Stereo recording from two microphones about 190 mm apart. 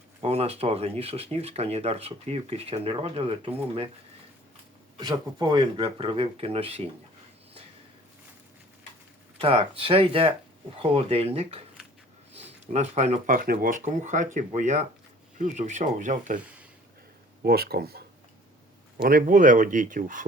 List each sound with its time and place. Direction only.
0.2 s speech: 30° right (ahead or behind)
4.9 s speech: 20° right (ahead or behind)
9.4 s speech: 30° right (ahead or behind)
17.4 s speech: 55° right (ahead or behind)
19.0 s speech: 45° right (ahead or behind)